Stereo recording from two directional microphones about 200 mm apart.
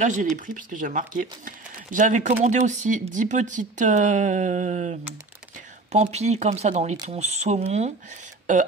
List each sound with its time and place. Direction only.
0.0 s speech: 40° right (ahead or behind)